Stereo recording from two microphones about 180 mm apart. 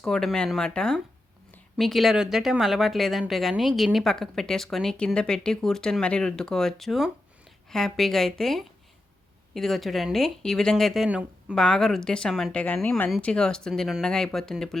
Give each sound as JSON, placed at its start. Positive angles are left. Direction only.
{"t": 0.0, "sound": "speech", "side_deg": 0}